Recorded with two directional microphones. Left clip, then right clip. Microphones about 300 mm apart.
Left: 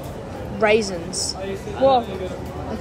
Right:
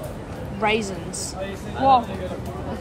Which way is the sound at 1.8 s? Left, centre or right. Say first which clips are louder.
Even; centre.